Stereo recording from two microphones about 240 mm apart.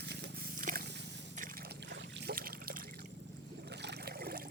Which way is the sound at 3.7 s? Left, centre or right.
Right.